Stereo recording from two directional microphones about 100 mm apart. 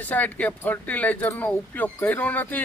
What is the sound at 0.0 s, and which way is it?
Speech, 15° left (ahead or behind).